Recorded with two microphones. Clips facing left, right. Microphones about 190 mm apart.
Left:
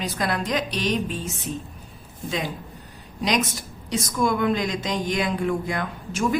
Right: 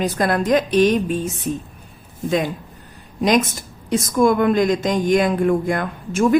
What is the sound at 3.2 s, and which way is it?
A woman's voice, 50° right (ahead or behind).